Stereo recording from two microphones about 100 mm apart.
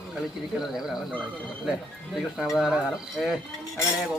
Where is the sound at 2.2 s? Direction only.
5° right (ahead or behind).